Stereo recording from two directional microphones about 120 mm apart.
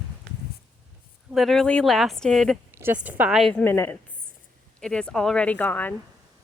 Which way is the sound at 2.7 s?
20° right (ahead or behind).